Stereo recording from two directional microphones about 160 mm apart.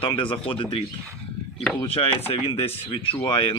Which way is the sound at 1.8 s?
35° left (ahead or behind).